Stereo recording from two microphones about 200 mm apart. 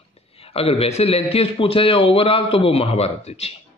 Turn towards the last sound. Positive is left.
turn(degrees=30)  # may be behind; listen again after turning